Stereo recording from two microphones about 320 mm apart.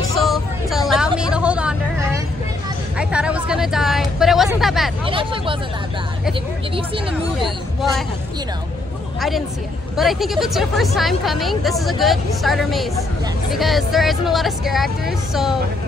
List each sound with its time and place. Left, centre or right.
0.1 s vehicle: centre
3.0 s a sound: centre
5.0 s speech: centre
9.9 s speech: centre